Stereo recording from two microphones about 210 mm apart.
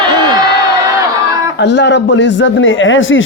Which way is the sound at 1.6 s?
55° left (ahead or behind).